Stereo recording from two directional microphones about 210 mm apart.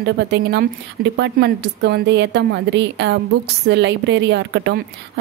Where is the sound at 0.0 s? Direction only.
55° right (ahead or behind).